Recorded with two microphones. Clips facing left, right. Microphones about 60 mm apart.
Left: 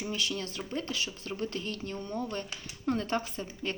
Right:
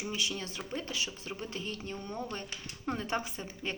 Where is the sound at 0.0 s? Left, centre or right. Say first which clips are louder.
Left 2 dB; centre.